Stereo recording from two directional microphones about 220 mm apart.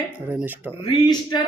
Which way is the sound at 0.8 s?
20° left (ahead or behind).